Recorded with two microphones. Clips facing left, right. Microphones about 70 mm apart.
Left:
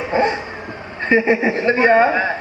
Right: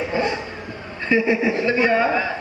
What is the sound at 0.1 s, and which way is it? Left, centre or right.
Vehicle, left.